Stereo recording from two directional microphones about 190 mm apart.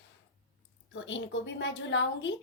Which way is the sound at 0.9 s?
75° left (ahead or behind).